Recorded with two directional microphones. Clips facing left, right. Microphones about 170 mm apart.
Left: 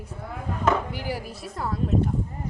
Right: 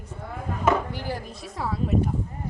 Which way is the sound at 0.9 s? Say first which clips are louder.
Left 1 dB; 10° left (ahead or behind).